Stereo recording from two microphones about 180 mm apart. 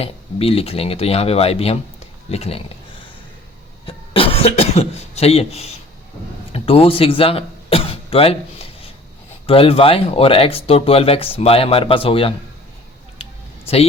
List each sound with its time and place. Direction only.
0.0 s speech: 35° left (ahead or behind)
3.8 s speech: 30° left (ahead or behind)
6.5 s cough: 30° left (ahead or behind)
9.5 s speech: 30° left (ahead or behind)